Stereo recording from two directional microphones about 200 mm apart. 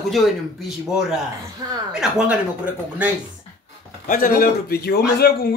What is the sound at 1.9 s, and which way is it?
Speech, 5° right (ahead or behind).